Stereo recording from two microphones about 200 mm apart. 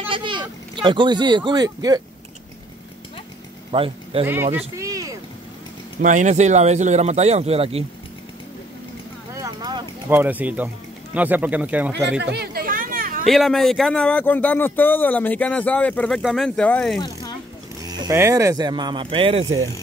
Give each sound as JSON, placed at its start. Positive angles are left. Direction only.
{"t": 0.1, "sound": "speech", "side_deg": -25}
{"t": 3.7, "sound": "speech", "side_deg": -30}
{"t": 4.3, "sound": "speech", "side_deg": -10}
{"t": 6.0, "sound": "a man's voice", "side_deg": -40}
{"t": 9.3, "sound": "a sound", "side_deg": -20}
{"t": 10.0, "sound": "speech", "side_deg": -10}
{"t": 12.2, "sound": "chatter", "side_deg": -55}
{"t": 13.2, "sound": "speech", "side_deg": 0}
{"t": 17.0, "sound": "a sound", "side_deg": 20}
{"t": 17.8, "sound": "speech", "side_deg": -15}